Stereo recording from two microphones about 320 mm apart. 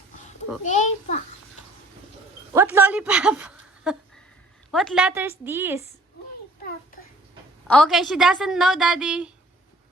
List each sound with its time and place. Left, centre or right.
0.6 s a child's voice: left
2.5 s a woman's voice: centre
7.7 s a woman's voice: centre